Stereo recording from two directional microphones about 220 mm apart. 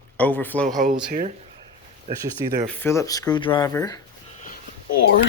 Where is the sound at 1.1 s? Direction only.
35° right (ahead or behind).